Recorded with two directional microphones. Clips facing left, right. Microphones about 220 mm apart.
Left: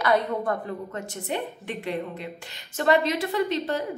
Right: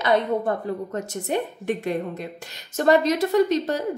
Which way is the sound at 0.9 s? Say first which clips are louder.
Right 5 dB; 45° right (ahead or behind).